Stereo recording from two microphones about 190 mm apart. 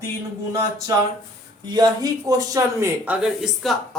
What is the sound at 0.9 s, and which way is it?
Speech, 15° right (ahead or behind).